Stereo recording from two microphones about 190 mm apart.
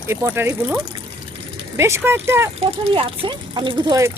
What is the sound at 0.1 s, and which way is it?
Speech, 15° right (ahead or behind).